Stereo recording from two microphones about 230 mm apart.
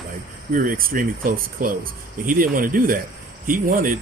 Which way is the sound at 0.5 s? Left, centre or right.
Right.